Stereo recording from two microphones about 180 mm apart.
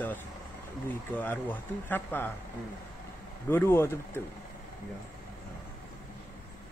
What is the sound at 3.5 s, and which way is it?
Speech, 15° left (ahead or behind).